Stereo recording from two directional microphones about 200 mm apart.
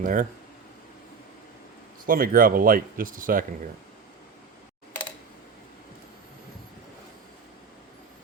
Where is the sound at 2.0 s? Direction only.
45° right (ahead or behind).